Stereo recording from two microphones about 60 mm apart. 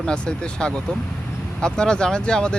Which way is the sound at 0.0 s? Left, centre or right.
Centre.